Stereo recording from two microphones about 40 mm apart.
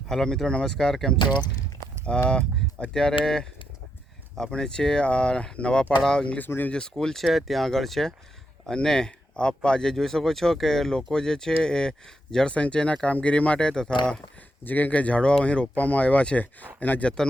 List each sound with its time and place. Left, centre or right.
0.1 s speech: centre
0.4 s speech: left
2.0 s speech: left
4.5 s speech: centre
6.5 s speech: left
6.9 s speech: centre
12.5 s speech: left
14.6 s speech: left
15.2 s speech: left
15.7 s speech: left